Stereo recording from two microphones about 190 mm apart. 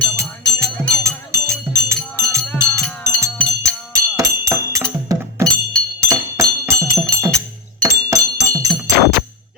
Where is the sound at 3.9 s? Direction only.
15° right (ahead or behind).